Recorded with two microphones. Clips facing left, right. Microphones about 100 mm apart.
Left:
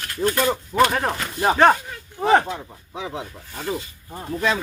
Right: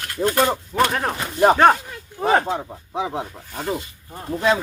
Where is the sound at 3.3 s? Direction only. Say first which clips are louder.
Right 2 dB; 20° right (ahead or behind).